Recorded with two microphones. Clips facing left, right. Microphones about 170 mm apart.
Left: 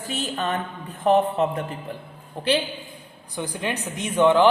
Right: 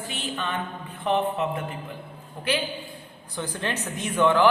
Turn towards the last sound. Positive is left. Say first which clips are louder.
# left 3 dB
turn(degrees=20)  # may be behind; listen again after turning